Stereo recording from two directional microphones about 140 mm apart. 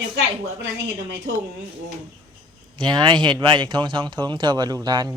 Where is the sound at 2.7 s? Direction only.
30° right (ahead or behind).